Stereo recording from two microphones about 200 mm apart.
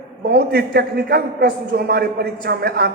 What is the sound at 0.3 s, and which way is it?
A man's voice, 50° right (ahead or behind).